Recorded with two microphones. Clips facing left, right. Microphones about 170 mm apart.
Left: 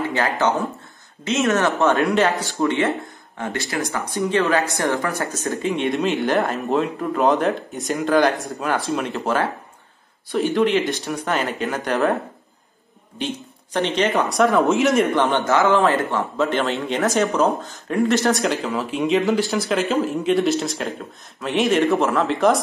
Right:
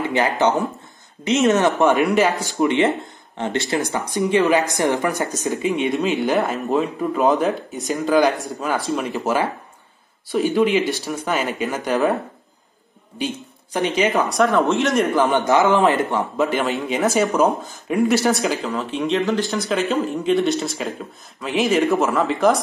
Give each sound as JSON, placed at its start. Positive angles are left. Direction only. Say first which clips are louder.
{"t": 0.1, "sound": "speech", "louder": "right 4 dB", "side_deg": -20}
{"t": 13.7, "sound": "speech", "louder": "right 1 dB", "side_deg": -15}
{"t": 14.0, "sound": "speech", "louder": "even", "side_deg": 0}
{"t": 15.3, "sound": "speech", "louder": "right 1 dB", "side_deg": -15}